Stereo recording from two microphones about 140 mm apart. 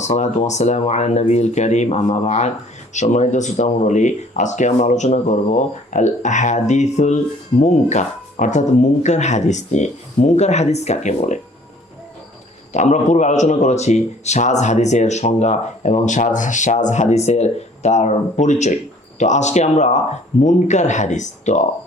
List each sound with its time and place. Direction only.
0.0 s speech: 55° left (ahead or behind)
12.7 s speech: 55° left (ahead or behind)